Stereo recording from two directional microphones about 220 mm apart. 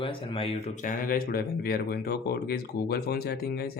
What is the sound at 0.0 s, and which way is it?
Speech, 25° left (ahead or behind).